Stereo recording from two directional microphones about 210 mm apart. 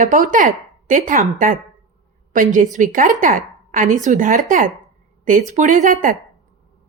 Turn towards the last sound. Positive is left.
turn(degrees=-35)  # may be behind; listen again after turning